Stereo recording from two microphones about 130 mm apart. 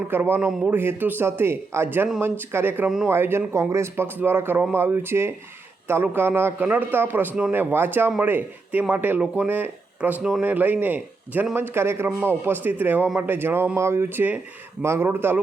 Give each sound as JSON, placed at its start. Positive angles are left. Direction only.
{"t": 0.1, "sound": "a man's voice", "side_deg": -15}